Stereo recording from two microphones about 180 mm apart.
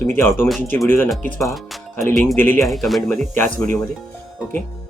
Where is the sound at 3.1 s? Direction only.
10° left (ahead or behind).